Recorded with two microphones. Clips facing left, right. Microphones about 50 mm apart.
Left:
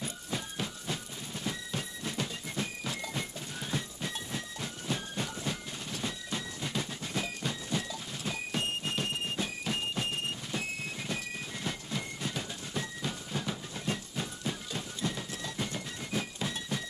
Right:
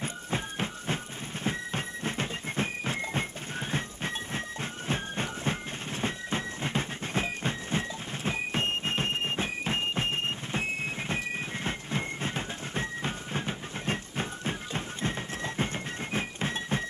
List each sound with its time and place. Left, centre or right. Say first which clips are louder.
0.0 s music: right 4 dB; right